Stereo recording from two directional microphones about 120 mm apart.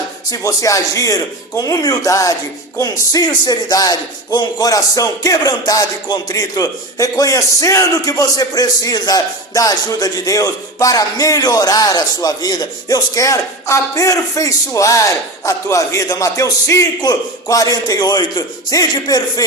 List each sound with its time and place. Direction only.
0.3 s a man's voice: 30° left (ahead or behind)